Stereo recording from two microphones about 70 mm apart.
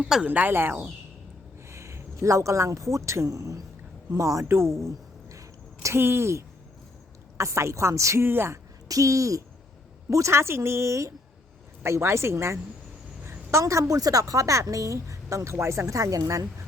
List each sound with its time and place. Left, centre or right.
0.3 s speech: right
1.7 s a woman's voice: right
4.4 s a sound: right
6.0 s a woman's voice: right
8.2 s a woman's voice: right
8.9 s a woman's voice: right